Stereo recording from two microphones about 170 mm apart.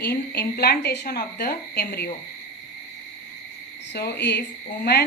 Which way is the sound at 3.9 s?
75° left (ahead or behind).